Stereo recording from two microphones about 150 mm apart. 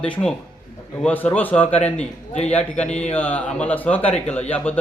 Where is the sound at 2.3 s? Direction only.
45° left (ahead or behind).